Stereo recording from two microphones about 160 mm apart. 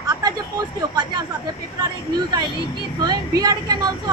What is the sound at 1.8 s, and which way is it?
Speech, 25° right (ahead or behind).